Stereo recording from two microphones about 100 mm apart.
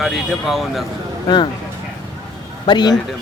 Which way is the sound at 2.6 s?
45° left (ahead or behind).